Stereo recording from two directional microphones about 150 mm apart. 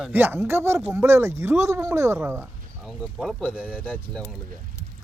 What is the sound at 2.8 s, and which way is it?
Speech, 5° right (ahead or behind).